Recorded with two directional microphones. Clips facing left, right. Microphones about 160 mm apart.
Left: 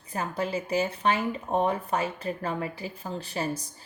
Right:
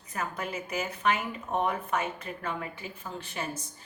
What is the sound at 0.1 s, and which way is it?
Speech, 30° left (ahead or behind).